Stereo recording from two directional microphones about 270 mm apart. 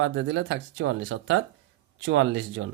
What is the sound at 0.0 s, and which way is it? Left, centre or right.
Speech, right.